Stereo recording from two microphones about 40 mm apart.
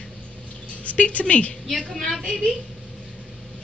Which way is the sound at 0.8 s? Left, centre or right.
Left.